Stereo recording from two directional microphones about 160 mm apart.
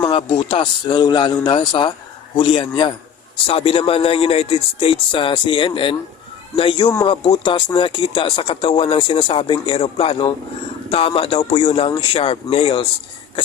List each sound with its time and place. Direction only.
0.0 s speech: 30° left (ahead or behind)